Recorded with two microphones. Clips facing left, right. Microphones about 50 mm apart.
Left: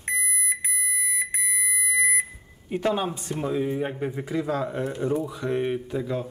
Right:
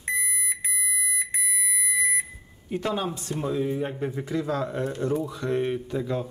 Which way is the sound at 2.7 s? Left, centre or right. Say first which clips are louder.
Left 3 dB; centre.